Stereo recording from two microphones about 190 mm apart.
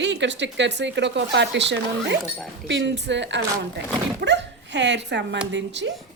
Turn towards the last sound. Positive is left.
turn(degrees=-70)  # may be behind; listen again after turning